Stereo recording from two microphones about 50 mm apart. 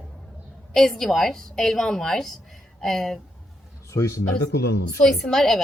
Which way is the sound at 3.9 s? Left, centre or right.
Left.